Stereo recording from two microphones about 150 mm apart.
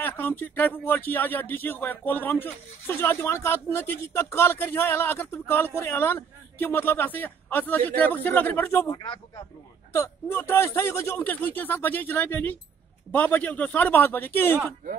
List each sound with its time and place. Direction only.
0.0 s speech: 10° left (ahead or behind)
8.9 s speech: 30° left (ahead or behind)
9.9 s speech: 15° left (ahead or behind)